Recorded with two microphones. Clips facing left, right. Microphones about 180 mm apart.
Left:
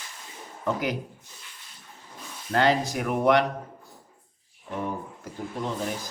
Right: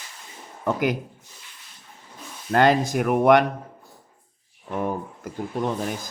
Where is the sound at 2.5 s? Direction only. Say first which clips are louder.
Right 4 dB; 50° right (ahead or behind).